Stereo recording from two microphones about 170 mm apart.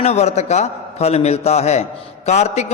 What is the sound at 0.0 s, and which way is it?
A man's voice, 40° left (ahead or behind).